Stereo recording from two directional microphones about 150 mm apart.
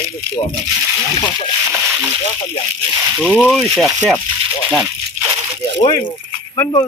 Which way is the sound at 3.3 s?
5° left (ahead or behind).